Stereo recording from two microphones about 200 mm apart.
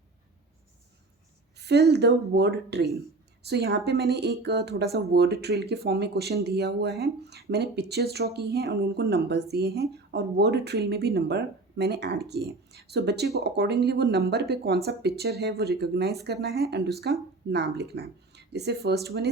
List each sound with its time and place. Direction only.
1.5 s speech: 55° right (ahead or behind)